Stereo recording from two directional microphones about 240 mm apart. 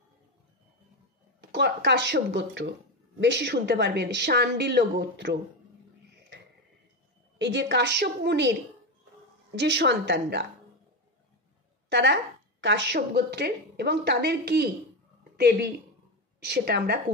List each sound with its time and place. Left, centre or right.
1.5 s a woman's voice: right
7.3 s a woman's voice: right
9.6 s a woman's voice: right
11.9 s a woman's voice: right